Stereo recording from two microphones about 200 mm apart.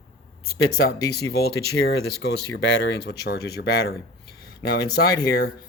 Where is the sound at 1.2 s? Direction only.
55° left (ahead or behind).